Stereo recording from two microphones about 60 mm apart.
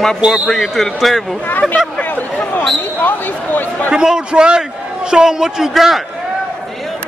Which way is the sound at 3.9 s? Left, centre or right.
Centre.